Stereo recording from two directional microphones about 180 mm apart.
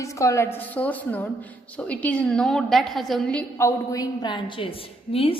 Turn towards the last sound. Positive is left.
turn(degrees=30)  # may be behind; listen again after turning